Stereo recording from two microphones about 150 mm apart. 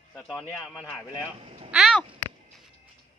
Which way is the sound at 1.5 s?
40° right (ahead or behind).